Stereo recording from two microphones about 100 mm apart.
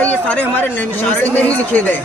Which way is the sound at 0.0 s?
15° left (ahead or behind).